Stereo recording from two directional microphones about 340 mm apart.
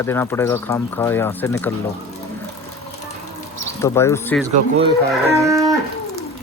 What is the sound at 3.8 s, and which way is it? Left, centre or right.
Speech, centre.